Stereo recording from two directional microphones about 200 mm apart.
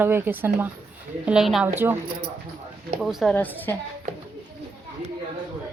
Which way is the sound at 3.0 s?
Centre (ahead or behind).